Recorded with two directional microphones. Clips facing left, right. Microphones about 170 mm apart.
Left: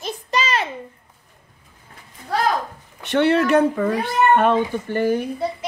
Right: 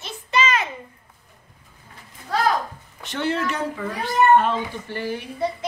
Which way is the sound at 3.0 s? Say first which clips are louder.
Left 8 dB; 65° left (ahead or behind).